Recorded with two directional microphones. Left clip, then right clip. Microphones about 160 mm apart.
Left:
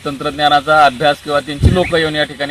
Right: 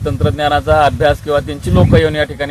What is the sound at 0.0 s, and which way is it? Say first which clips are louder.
A man's voice: left 1 dB; 30° right (ahead or behind).